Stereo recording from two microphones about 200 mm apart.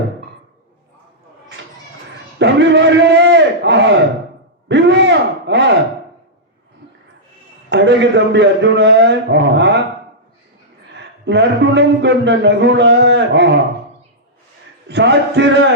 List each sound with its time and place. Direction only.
2.4 s a sound: 60° right (ahead or behind)
7.7 s a man's voice: 60° right (ahead or behind)
10.9 s a man's voice: 60° right (ahead or behind)
14.8 s a man's voice: 60° right (ahead or behind)